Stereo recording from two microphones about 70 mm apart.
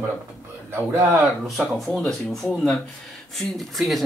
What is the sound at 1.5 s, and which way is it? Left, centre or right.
Speech, centre.